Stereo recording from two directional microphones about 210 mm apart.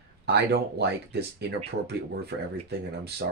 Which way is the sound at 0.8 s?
50° right (ahead or behind).